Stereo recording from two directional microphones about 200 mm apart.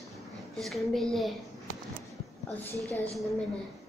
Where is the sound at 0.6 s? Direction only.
Centre (ahead or behind).